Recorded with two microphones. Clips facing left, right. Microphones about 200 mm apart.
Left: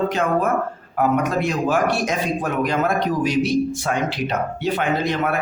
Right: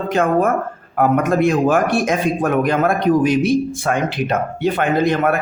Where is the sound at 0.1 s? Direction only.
50° right (ahead or behind).